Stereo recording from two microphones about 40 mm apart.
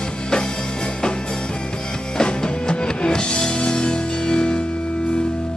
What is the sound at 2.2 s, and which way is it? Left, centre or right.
Music, left.